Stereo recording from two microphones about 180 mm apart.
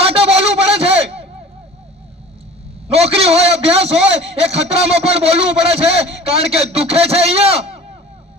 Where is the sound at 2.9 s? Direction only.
35° right (ahead or behind).